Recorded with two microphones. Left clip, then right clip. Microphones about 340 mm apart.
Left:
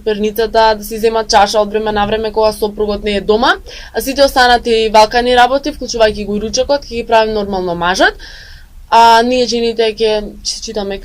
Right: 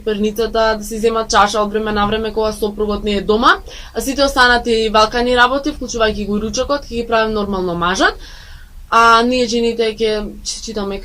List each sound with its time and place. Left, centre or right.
0.0 s a woman's voice: left